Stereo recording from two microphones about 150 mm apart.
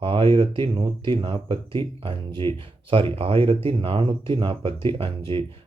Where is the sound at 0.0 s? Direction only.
35° right (ahead or behind).